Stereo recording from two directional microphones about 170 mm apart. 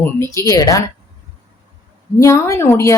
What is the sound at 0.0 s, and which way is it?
Speech, 15° left (ahead or behind).